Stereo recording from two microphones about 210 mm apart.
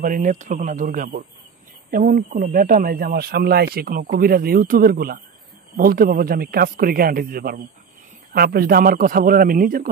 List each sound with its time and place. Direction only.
0.0 s speech: 40° right (ahead or behind)